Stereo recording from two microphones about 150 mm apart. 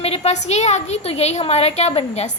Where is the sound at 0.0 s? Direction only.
40° left (ahead or behind).